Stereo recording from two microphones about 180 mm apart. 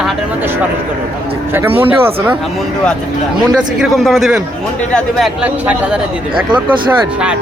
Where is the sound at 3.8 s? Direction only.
Centre (ahead or behind).